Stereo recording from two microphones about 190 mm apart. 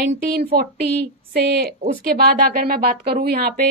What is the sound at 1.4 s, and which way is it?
Speech, 60° right (ahead or behind).